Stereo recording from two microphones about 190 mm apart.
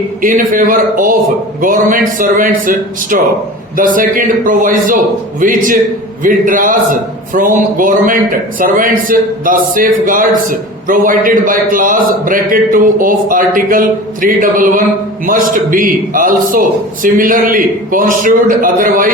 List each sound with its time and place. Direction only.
0.2 s a man's voice: 45° right (ahead or behind)